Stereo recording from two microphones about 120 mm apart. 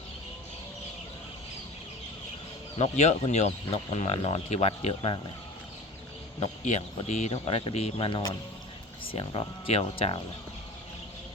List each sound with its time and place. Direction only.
2.7 s speech: 65° left (ahead or behind)
7.1 s speech: 65° left (ahead or behind)